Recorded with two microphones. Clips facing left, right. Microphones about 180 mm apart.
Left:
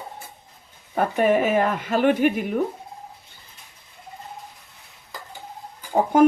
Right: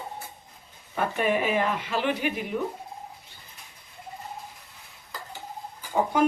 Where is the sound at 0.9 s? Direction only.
45° left (ahead or behind).